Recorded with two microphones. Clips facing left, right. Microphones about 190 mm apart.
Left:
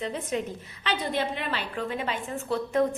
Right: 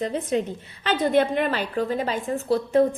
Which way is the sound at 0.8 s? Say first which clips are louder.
Right 8 dB; 50° right (ahead or behind).